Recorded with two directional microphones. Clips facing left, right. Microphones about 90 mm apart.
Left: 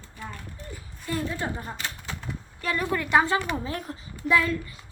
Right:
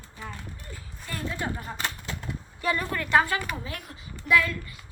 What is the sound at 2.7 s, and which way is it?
A woman's voice, 5° left (ahead or behind).